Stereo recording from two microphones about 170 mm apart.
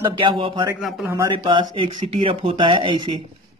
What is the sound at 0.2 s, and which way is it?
Speech, 30° right (ahead or behind).